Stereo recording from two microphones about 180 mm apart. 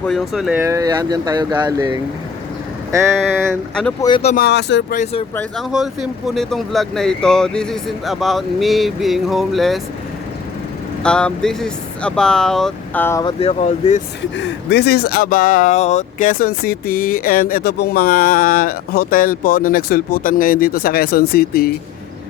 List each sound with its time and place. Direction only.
0.0 s speech: centre (ahead or behind)
0.6 s speech: 15° right (ahead or behind)
3.8 s speech: 5° left (ahead or behind)
4.4 s speech: 65° left (ahead or behind)
5.3 s speech: 10° left (ahead or behind)
5.7 s speech: centre (ahead or behind)
11.0 s speech: 5° left (ahead or behind)
13.2 s speech: 35° left (ahead or behind)
14.2 s speech: 80° left; by 21.7 s 55° left (ahead or behind)